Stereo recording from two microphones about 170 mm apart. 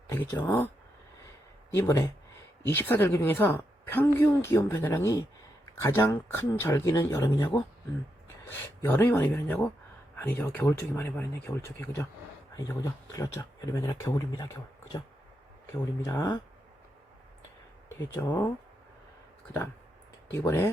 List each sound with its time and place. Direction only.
0.1 s speech: 15° left (ahead or behind)
1.7 s a woman's voice: 15° left (ahead or behind)
16.0 s speech: 20° left (ahead or behind)
18.2 s a woman's voice: 15° left (ahead or behind)
20.3 s a woman's voice: 15° left (ahead or behind)